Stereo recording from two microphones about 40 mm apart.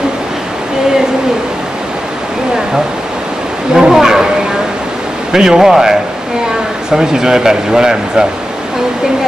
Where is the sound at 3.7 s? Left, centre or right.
Centre.